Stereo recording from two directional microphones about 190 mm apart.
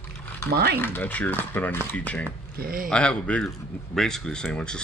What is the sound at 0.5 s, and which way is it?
Speech, 60° right (ahead or behind).